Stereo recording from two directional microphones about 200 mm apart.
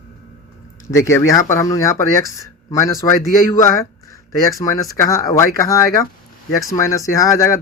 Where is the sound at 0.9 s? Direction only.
15° left (ahead or behind).